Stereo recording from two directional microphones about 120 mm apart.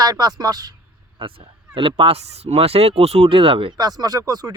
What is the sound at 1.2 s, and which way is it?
Speech, 45° right (ahead or behind).